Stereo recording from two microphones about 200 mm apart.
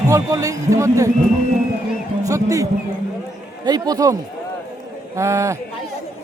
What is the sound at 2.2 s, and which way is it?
Speech, 15° right (ahead or behind).